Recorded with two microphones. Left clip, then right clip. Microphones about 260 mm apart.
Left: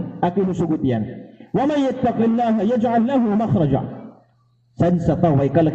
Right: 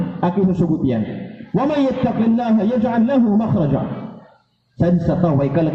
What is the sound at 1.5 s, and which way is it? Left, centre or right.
A man's voice, left.